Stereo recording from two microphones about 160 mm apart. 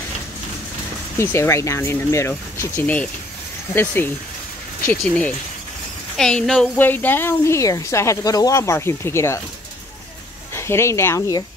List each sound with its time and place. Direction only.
1.1 s speech: 15° left (ahead or behind)
10.5 s speech: 15° left (ahead or behind)